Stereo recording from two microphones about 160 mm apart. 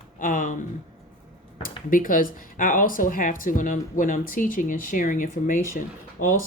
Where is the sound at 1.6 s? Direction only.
60° left (ahead or behind).